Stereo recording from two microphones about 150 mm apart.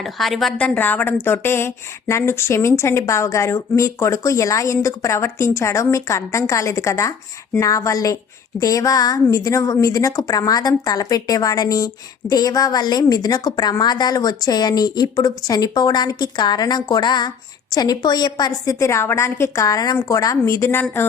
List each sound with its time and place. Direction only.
0.0 s a woman's voice: centre (ahead or behind); by 20.8 s 15° left (ahead or behind)